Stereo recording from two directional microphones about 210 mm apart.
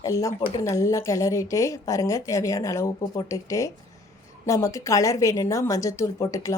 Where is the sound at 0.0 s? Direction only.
15° left (ahead or behind).